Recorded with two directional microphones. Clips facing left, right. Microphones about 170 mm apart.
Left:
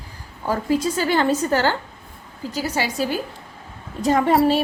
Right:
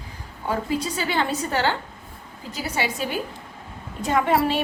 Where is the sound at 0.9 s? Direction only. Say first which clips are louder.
Left 5 dB; 45° left (ahead or behind).